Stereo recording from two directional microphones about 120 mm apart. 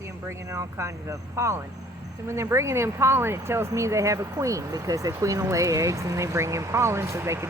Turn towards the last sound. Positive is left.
turn(degrees=-25)  # may be behind; listen again after turning